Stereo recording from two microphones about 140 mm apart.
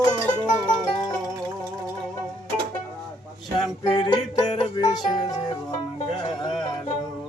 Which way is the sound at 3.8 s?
30° left (ahead or behind).